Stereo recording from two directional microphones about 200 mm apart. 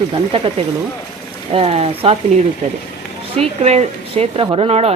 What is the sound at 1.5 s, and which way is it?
Speech, 30° right (ahead or behind).